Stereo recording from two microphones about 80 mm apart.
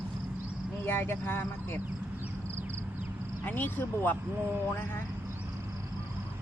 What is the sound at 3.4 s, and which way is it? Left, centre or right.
Speech, left.